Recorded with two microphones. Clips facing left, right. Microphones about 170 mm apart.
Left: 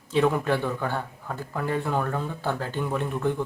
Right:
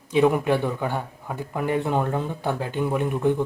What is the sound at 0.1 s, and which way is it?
A man's voice, 15° right (ahead or behind).